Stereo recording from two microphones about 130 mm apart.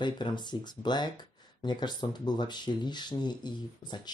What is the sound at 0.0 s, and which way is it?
Speech, 35° left (ahead or behind).